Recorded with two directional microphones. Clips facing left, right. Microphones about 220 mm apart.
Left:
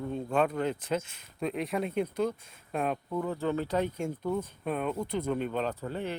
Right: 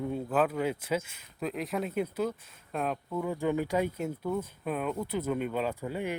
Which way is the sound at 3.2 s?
15° right (ahead or behind).